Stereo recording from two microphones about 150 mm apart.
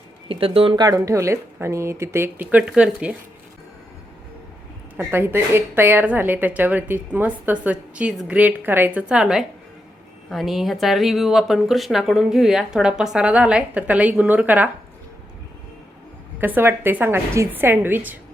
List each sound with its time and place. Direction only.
0.3 s speech: 40° right (ahead or behind)
0.9 s a woman's voice: 20° right (ahead or behind)
4.9 s a woman's voice: 15° right (ahead or behind)
16.4 s a woman's voice: 15° right (ahead or behind)